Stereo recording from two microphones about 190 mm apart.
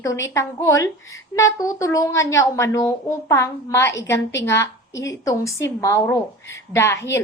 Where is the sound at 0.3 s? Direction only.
15° left (ahead or behind).